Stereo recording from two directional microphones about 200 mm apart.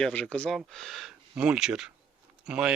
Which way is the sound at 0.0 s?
5° left (ahead or behind).